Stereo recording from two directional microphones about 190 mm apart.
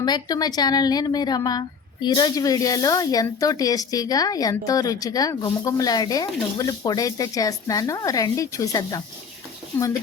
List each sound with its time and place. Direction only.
0.0 s speech: 20° left (ahead or behind)